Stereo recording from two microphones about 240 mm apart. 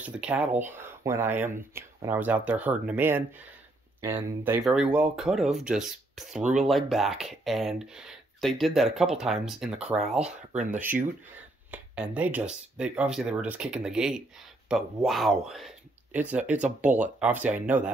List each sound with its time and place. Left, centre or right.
0.0 s a sound: centre
0.6 s speech: centre
10.5 s speech: right
10.8 s speech: centre